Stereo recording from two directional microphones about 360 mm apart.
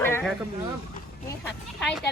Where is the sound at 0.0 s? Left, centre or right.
Centre.